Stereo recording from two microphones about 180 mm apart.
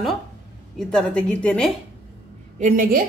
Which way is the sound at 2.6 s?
45° right (ahead or behind).